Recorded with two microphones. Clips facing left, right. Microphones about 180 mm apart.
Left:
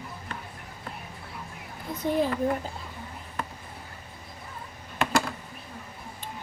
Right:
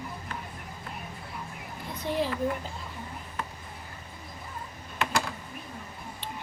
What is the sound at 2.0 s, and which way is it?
Speech, 45° left (ahead or behind).